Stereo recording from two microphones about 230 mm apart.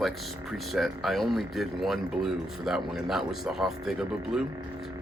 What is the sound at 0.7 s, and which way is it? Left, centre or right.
Speech, centre.